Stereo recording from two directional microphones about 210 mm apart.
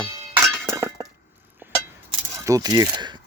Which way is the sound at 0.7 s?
10° right (ahead or behind).